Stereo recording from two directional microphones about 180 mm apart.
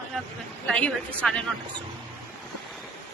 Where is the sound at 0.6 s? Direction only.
5° left (ahead or behind).